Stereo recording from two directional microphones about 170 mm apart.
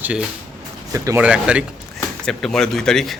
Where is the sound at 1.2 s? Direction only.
5° right (ahead or behind).